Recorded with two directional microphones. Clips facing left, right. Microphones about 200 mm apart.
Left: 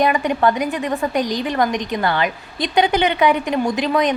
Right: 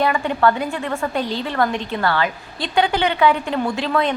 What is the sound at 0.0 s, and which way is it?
A woman's voice, 15° left (ahead or behind).